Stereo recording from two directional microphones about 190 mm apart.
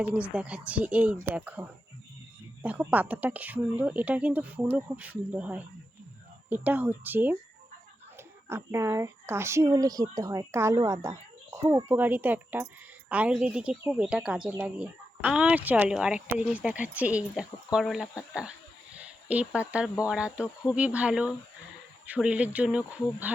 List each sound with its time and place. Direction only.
0.0 s speech: 5° right (ahead or behind)
2.6 s speech: 10° right (ahead or behind)
8.4 s speech: 15° right (ahead or behind)